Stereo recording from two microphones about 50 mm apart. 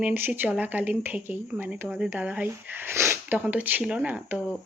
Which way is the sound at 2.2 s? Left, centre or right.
Right.